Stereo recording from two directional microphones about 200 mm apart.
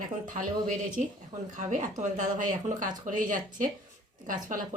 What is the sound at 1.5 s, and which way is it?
Speech, 40° right (ahead or behind).